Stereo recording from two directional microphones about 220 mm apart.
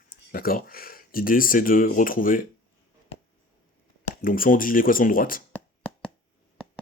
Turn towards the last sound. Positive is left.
turn(degrees=40)  # may be behind; listen again after turning